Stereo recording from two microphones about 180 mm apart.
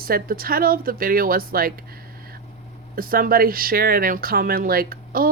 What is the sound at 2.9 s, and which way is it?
Speech, 55° right (ahead or behind).